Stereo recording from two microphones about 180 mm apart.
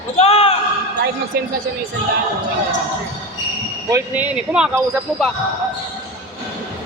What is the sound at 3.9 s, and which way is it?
Speech, 10° right (ahead or behind).